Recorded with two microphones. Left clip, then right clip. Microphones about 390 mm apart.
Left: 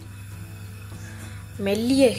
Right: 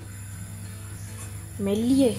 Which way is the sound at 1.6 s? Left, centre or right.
Left.